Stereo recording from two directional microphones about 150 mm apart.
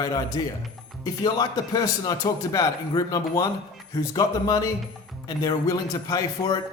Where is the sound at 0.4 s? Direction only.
30° left (ahead or behind).